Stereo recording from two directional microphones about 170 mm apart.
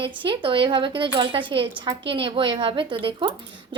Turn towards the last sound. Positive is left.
turn(degrees=-30)  # may be behind; listen again after turning